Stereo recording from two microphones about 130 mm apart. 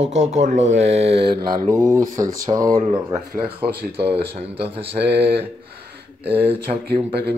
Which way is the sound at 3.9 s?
45° right (ahead or behind).